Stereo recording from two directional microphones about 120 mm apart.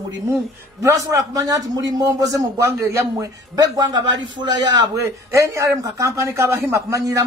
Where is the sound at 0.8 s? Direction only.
30° right (ahead or behind).